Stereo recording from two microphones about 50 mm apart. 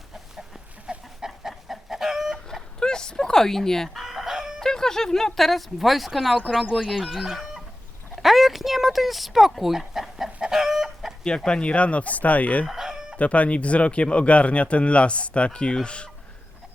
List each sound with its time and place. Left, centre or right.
0.9 s chicken: centre
1.3 s chicken: centre
2.5 s a sound: centre
3.8 s chicken: centre
4.6 s speech: centre
7.1 s chicken: centre
8.1 s a sound: centre
10.4 s chicken: centre
11.2 s speech: centre
12.6 s chicken: centre
13.1 s speech: left